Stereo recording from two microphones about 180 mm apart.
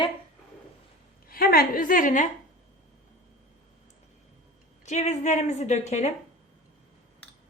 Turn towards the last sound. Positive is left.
turn(degrees=40)  # may be behind; listen again after turning